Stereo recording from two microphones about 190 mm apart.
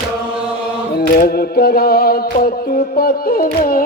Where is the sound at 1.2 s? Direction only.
55° left (ahead or behind).